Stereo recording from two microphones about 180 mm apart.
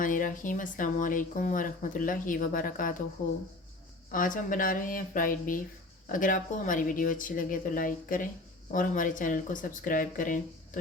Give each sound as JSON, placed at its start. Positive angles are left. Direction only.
{"t": 0.0, "sound": "speech", "side_deg": 50}